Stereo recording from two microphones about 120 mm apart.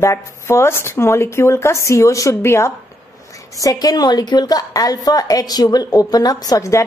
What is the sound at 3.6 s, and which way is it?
A woman's voice, 30° left (ahead or behind).